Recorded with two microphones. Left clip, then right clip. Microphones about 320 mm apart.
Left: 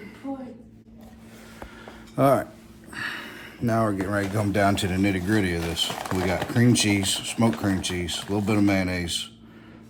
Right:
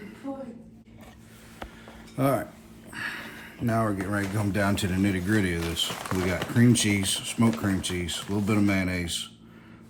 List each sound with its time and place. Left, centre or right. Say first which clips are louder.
2.1 s speech: left 6 dB; centre
6.1 s speech: left 2 dB; left
6.5 s speech: left 1 dB; centre